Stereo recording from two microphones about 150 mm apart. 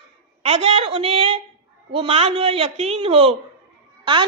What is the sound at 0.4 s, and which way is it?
A woman's voice, 40° right (ahead or behind).